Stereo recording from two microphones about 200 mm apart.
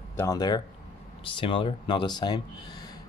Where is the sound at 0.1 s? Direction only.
15° left (ahead or behind).